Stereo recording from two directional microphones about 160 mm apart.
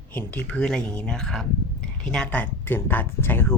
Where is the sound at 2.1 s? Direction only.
5° left (ahead or behind).